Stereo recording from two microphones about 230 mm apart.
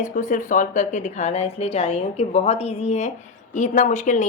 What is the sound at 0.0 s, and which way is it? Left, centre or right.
Speech, left.